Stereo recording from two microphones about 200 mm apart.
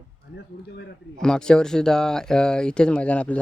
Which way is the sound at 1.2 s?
5° left (ahead or behind).